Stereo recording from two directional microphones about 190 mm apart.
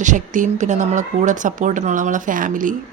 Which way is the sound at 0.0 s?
40° right (ahead or behind).